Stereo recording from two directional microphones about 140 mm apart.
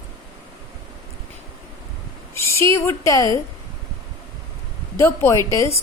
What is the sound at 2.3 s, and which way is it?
A woman's voice, 20° left (ahead or behind).